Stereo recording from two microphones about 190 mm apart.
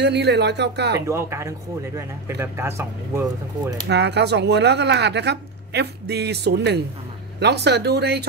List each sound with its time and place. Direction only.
0.0 s a woman's voice: 65° right (ahead or behind)
1.0 s speech: 15° right (ahead or behind)
3.9 s a woman's voice: 65° right (ahead or behind)